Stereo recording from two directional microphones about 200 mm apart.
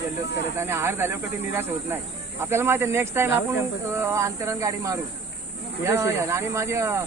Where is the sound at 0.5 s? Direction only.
10° right (ahead or behind).